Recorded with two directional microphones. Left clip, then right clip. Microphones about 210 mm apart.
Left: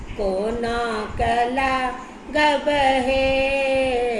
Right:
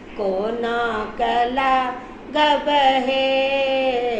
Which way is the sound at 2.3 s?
20° left (ahead or behind).